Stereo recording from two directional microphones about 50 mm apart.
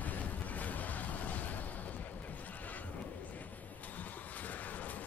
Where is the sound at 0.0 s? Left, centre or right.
Left.